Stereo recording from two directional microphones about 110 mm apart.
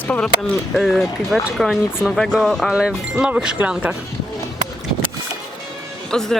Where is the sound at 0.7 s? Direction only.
Centre (ahead or behind).